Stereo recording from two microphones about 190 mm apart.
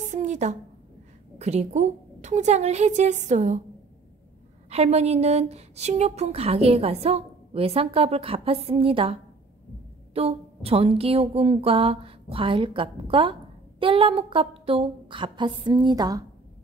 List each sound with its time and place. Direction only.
0.1 s a sound: 40° right (ahead or behind)
1.4 s speech: 35° right (ahead or behind)
4.6 s speech: 35° right (ahead or behind); by 16.3 s 20° right (ahead or behind)